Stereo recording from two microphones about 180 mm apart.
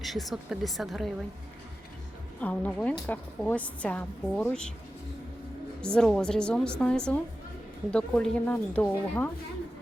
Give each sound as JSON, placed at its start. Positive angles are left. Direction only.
{"t": 0.0, "sound": "a woman's voice", "side_deg": 0}
{"t": 2.4, "sound": "a woman's voice", "side_deg": 5}
{"t": 5.8, "sound": "a woman's voice", "side_deg": 5}